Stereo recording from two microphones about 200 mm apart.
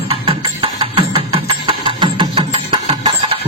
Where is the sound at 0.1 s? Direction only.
25° right (ahead or behind).